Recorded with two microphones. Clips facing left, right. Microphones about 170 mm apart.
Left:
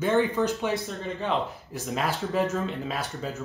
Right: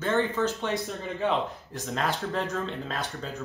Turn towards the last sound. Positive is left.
turn(degrees=10)  # may be behind; listen again after turning